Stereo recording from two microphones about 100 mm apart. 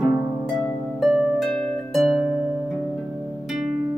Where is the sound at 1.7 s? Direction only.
Centre (ahead or behind).